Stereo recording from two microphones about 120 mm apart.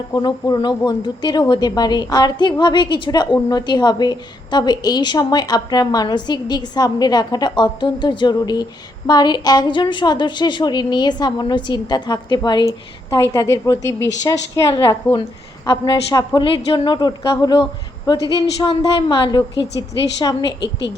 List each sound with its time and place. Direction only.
0.1 s a woman's voice: 35° left (ahead or behind)
13.1 s a woman's voice: 25° left (ahead or behind)